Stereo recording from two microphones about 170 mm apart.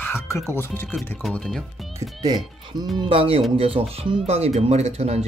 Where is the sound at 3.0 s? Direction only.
30° right (ahead or behind).